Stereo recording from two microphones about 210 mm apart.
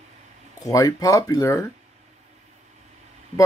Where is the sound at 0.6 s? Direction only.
15° left (ahead or behind).